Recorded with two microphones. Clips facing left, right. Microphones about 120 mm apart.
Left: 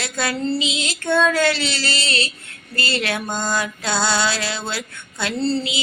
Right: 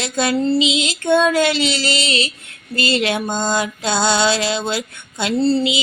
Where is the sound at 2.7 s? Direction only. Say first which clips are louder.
Right 5 dB; 20° right (ahead or behind).